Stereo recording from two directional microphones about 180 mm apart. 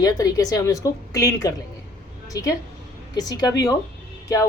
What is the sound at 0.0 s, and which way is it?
A woman's voice, 20° left (ahead or behind).